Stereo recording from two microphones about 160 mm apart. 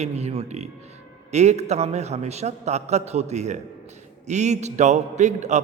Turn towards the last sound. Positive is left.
turn(degrees=-45)  # may be behind; listen again after turning